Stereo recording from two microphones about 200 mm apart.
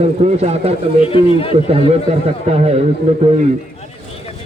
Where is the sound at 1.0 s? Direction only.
30° left (ahead or behind).